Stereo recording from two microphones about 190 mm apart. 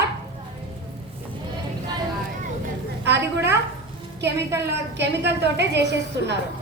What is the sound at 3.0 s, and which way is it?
Speech, 65° right (ahead or behind).